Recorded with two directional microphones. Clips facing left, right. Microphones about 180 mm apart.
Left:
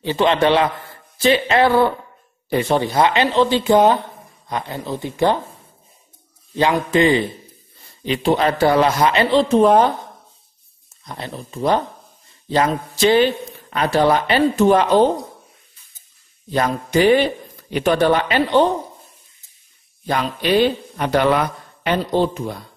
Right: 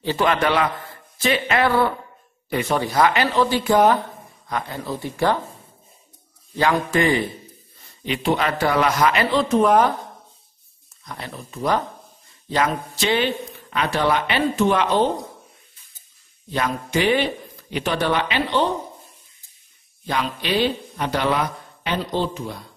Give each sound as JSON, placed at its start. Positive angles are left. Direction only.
{"t": 0.0, "sound": "a man's voice", "side_deg": 20}
{"t": 6.5, "sound": "a man's voice", "side_deg": 20}
{"t": 8.0, "sound": "a man's voice", "side_deg": 35}
{"t": 11.1, "sound": "a man's voice", "side_deg": 25}
{"t": 16.5, "sound": "speech", "side_deg": 40}
{"t": 20.1, "sound": "speech", "side_deg": 50}